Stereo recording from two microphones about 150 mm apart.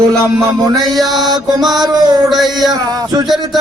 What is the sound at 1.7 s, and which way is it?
Speech, 25° right (ahead or behind).